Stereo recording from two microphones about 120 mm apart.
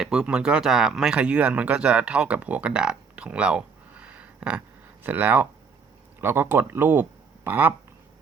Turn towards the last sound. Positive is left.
turn(degrees=-15)  # may be behind; listen again after turning